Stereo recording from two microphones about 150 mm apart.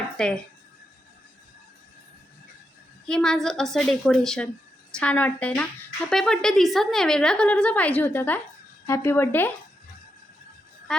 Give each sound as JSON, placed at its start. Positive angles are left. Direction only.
{"t": 0.2, "sound": "a woman's voice", "side_deg": 5}
{"t": 3.1, "sound": "a woman's voice", "side_deg": 5}